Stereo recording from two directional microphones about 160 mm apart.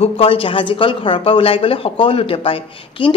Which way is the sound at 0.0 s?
35° left (ahead or behind).